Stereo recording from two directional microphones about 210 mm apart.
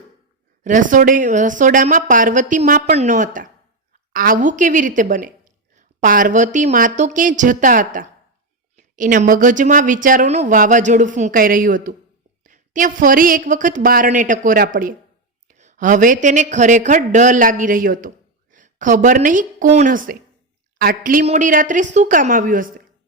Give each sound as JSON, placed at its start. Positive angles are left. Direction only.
{"t": 0.6, "sound": "a woman's voice", "side_deg": -35}